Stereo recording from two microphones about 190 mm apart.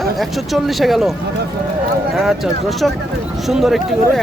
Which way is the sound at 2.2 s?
Centre (ahead or behind).